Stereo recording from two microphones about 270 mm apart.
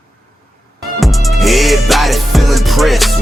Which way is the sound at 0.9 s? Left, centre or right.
Centre.